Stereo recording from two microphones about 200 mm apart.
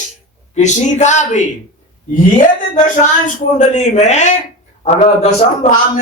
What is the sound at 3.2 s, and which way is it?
Speech, 35° left (ahead or behind).